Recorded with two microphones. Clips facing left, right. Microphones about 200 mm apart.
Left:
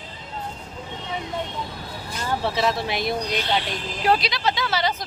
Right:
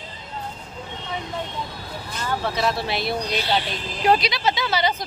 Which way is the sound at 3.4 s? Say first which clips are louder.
Right 1 dB; 5° right (ahead or behind).